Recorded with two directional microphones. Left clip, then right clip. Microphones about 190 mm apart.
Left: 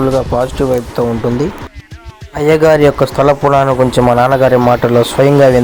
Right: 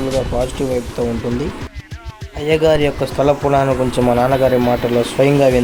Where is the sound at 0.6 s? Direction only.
20° left (ahead or behind).